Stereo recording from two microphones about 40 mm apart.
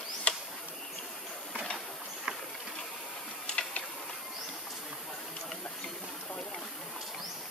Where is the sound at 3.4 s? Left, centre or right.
Left.